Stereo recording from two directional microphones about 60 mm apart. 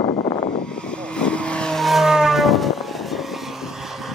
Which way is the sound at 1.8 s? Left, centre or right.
Centre.